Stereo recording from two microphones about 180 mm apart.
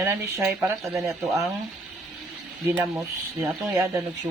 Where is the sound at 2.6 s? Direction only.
15° right (ahead or behind).